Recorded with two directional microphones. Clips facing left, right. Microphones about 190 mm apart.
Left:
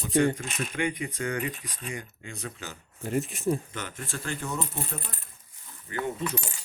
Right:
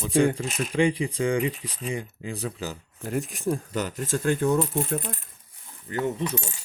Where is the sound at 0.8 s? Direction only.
30° right (ahead or behind).